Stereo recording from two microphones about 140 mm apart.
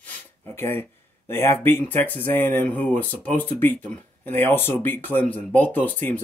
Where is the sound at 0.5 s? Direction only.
15° left (ahead or behind).